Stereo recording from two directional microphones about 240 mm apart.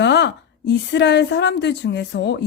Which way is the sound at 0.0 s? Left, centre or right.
Left.